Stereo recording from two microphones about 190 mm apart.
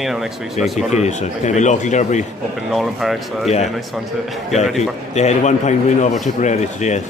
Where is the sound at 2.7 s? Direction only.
Centre (ahead or behind).